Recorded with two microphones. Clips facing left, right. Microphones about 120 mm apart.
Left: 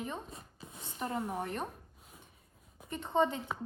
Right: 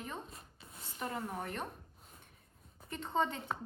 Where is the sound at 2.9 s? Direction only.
5° left (ahead or behind).